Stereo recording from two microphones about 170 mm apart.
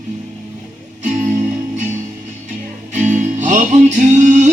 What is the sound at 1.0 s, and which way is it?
Music, 45° right (ahead or behind).